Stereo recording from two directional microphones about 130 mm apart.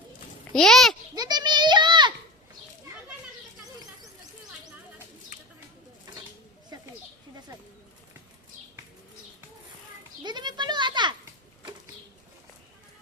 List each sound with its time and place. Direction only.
0.5 s a child's voice: 5° left (ahead or behind)
1.1 s children playing: 30° right (ahead or behind)
10.2 s a sound: 35° right (ahead or behind)